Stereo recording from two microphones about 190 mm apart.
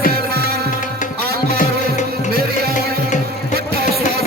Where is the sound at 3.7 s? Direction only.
55° right (ahead or behind).